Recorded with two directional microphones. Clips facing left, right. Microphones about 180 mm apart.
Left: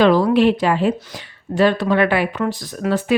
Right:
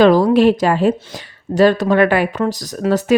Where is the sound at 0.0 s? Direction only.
40° right (ahead or behind).